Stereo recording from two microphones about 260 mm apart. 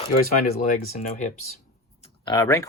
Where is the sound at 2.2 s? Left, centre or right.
Centre.